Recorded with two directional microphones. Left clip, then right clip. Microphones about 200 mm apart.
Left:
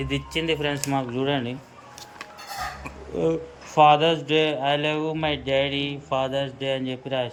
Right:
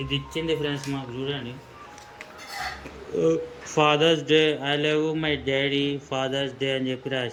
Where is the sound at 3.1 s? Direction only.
5° left (ahead or behind).